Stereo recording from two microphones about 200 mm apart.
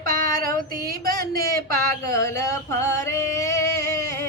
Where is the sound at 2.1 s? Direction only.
15° left (ahead or behind).